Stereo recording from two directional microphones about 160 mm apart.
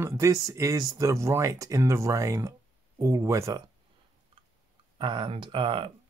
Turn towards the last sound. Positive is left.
turn(degrees=-30)  # may be behind; listen again after turning